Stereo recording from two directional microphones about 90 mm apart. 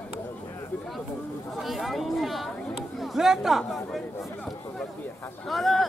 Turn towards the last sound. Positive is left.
turn(degrees=0)  # may be behind; listen again after turning